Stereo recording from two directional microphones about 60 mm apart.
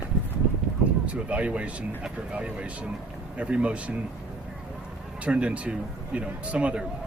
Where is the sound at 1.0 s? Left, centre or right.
Right.